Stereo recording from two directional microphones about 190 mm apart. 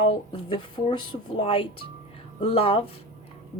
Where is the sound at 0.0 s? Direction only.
30° left (ahead or behind).